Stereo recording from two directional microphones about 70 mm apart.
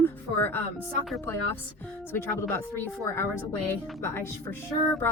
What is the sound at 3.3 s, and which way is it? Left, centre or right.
A woman's voice, left.